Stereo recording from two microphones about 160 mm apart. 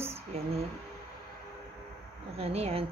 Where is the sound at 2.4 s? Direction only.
40° right (ahead or behind).